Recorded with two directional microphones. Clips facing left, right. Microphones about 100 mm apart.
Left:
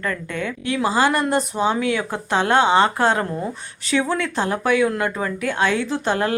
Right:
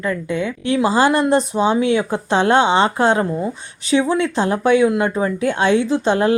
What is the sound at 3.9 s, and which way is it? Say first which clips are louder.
Speech: right 5 dB; 20° right (ahead or behind).